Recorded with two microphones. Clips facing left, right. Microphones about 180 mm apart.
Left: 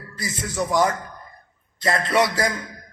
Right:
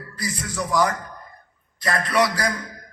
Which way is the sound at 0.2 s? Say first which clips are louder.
Left 2 dB; 25° left (ahead or behind).